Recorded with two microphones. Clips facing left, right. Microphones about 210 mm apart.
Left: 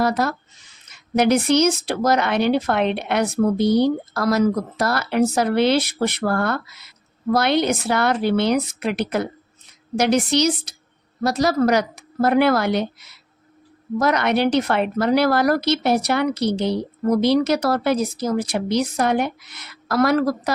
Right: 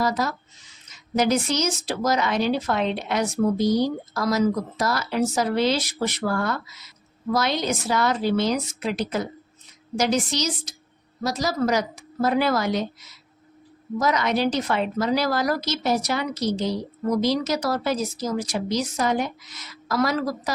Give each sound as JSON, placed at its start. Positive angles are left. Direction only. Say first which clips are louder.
{"t": 0.0, "sound": "speech", "louder": "left 4 dB", "side_deg": 60}